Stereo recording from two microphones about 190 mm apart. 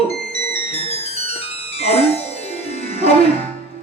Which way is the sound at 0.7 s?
30° left (ahead or behind).